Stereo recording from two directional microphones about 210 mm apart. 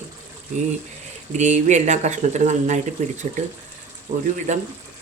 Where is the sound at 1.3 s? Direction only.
35° right (ahead or behind).